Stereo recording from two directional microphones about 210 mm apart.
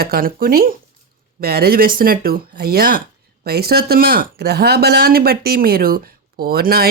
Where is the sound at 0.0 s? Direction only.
45° right (ahead or behind).